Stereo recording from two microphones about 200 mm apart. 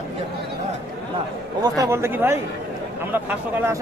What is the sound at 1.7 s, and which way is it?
Speech, 15° right (ahead or behind).